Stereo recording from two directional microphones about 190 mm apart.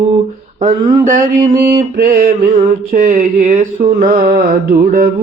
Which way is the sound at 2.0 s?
50° right (ahead or behind).